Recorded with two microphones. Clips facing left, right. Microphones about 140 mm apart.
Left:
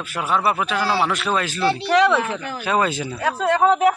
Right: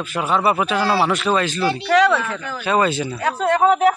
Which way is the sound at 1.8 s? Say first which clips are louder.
Right 2 dB; 20° left (ahead or behind).